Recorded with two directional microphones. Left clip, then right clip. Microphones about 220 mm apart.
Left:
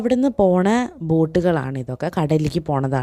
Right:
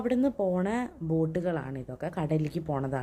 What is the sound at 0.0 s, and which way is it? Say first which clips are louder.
Speech: left 10 dB; 40° left (ahead or behind).